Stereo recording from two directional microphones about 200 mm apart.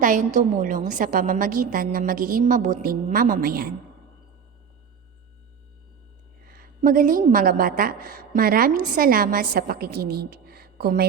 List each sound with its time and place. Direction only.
0.0 s a woman's voice: 40° right (ahead or behind)
6.4 s a woman's voice: 45° right (ahead or behind)